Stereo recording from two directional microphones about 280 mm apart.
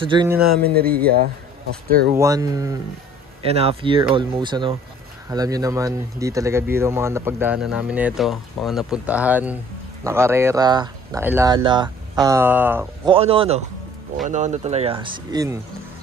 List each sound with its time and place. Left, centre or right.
0.0 s speech: centre
0.4 s a sound: right
1.0 s speech: right
2.1 s speech: centre
13.1 s speech: centre